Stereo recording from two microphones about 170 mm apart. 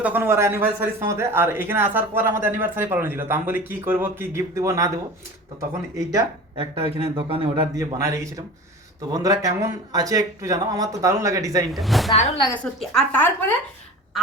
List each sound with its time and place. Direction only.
0.0 s speech: 10° right (ahead or behind)
6.1 s speech: 20° right (ahead or behind)
6.7 s speech: 35° right (ahead or behind); by 11.6 s 20° right (ahead or behind)
11.7 s speech: centre (ahead or behind)